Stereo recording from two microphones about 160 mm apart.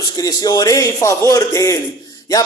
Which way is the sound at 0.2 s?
25° left (ahead or behind).